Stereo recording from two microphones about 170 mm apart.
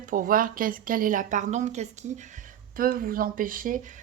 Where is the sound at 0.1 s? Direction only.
55° right (ahead or behind).